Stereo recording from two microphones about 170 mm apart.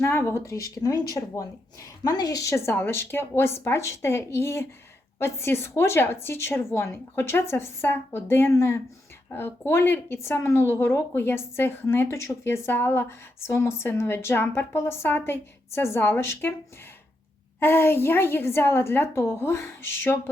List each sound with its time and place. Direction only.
0.0 s speech: 15° left (ahead or behind)
17.6 s speech: 15° left (ahead or behind)